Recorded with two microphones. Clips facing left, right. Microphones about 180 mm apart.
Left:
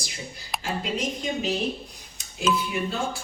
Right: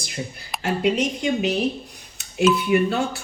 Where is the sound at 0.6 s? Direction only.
70° right (ahead or behind).